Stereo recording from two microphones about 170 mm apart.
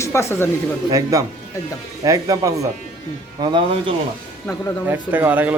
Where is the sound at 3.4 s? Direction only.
30° right (ahead or behind).